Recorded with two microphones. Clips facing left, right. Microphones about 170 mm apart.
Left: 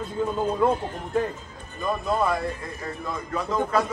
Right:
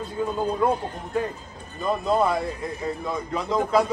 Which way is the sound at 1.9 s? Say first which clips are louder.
Right 2 dB; 20° right (ahead or behind).